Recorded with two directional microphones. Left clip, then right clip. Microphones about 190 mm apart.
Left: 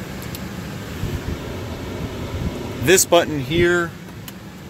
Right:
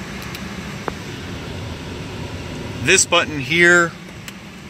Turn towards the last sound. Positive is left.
turn(degrees=-10)  # may be behind; listen again after turning